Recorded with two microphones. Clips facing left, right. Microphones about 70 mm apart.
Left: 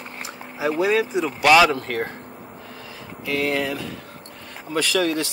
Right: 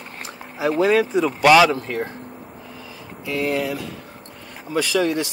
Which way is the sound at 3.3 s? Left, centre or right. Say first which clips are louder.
Even; right.